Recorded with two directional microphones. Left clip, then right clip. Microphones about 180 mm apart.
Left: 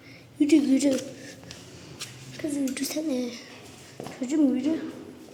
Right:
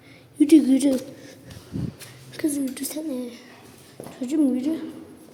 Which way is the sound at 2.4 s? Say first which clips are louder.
Right 6 dB; 40° right (ahead or behind).